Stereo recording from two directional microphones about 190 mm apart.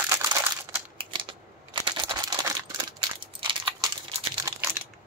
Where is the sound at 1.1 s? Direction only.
25° right (ahead or behind).